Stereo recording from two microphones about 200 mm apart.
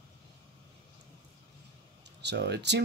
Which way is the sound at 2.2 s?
60° right (ahead or behind).